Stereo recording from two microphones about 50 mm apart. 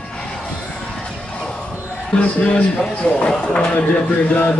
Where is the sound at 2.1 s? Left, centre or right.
Left.